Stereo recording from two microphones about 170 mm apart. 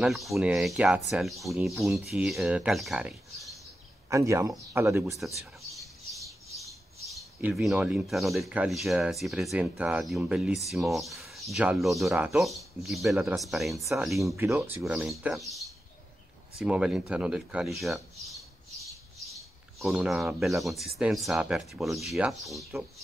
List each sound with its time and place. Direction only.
0.0 s speech: centre (ahead or behind)
3.3 s a sound: centre (ahead or behind)
4.1 s speech: 15° right (ahead or behind)
5.7 s bird: centre (ahead or behind)
7.1 s speech: centre (ahead or behind)
19.2 s bird: centre (ahead or behind)
21.0 s speech: centre (ahead or behind)